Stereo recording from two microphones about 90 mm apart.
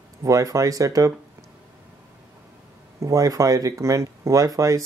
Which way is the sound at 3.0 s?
35° right (ahead or behind).